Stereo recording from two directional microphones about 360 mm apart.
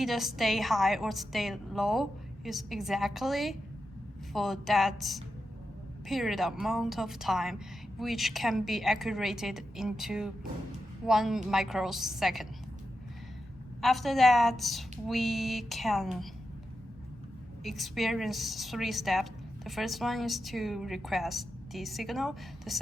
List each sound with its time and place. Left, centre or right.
0.0 s a woman's voice: centre
13.8 s a woman's voice: centre
17.6 s a woman's voice: centre